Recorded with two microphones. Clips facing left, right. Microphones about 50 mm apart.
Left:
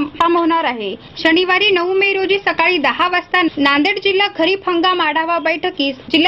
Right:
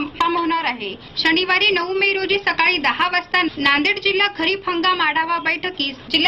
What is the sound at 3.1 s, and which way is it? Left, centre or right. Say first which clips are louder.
A woman's voice: left 4 dB; left.